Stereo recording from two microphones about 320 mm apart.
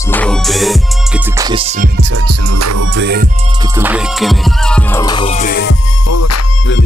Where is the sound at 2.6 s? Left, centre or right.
Right.